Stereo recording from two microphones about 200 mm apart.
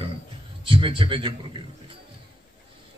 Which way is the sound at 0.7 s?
25° right (ahead or behind).